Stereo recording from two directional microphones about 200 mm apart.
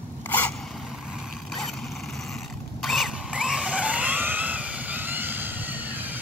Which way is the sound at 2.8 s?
Centre (ahead or behind).